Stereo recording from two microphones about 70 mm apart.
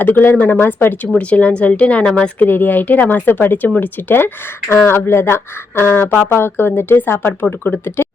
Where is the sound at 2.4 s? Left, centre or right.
Left.